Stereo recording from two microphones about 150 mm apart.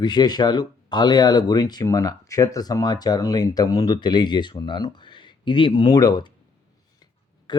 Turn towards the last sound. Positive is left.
turn(degrees=25)  # may be behind; listen again after turning